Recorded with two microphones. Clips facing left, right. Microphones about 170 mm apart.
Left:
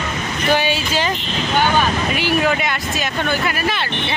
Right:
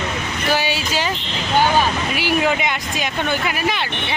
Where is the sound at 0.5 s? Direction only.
10° right (ahead or behind).